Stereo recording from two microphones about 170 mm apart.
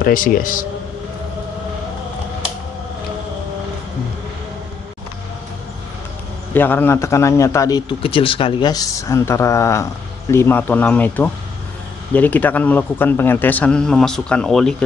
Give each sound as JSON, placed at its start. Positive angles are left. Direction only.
{"t": 0.0, "sound": "a man's voice", "side_deg": 55}
{"t": 6.5, "sound": "a man's voice", "side_deg": 10}
{"t": 8.0, "sound": "a man's voice", "side_deg": 30}